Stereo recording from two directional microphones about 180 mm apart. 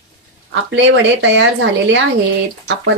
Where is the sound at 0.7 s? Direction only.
90° right.